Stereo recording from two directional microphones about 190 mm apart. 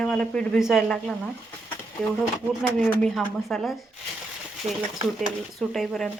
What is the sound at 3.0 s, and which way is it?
Speech, 5° left (ahead or behind).